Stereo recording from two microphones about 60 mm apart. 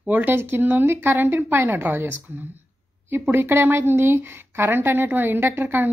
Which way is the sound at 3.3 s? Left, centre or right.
Right.